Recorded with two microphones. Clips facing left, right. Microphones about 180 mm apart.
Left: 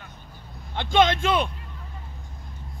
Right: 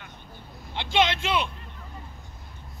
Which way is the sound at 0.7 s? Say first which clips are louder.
Left 4 dB; 50° left (ahead or behind).